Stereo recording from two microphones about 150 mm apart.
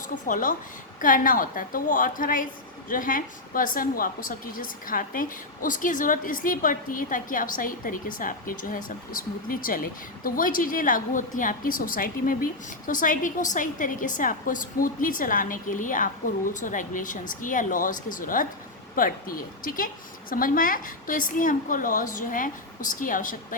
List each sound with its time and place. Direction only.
0.1 s a woman's voice: 65° left (ahead or behind)
12.9 s a woman's voice: 60° left (ahead or behind)